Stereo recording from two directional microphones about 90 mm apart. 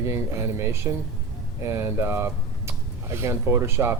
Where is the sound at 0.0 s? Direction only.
30° right (ahead or behind).